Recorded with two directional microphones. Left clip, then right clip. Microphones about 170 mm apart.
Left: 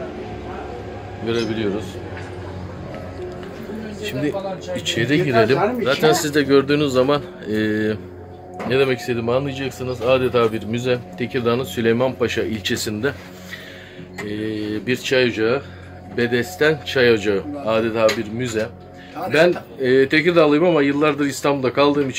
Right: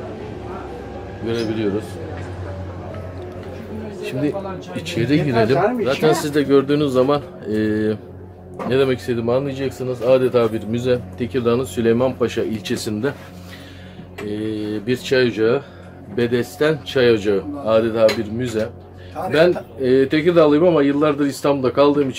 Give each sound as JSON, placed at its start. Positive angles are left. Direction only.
{"t": 1.2, "sound": "a man's voice", "side_deg": 15}
{"t": 4.0, "sound": "a man's voice", "side_deg": 0}
{"t": 14.3, "sound": "speech", "side_deg": 0}